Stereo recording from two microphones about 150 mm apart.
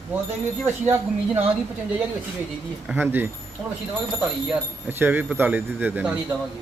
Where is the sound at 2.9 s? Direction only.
15° right (ahead or behind).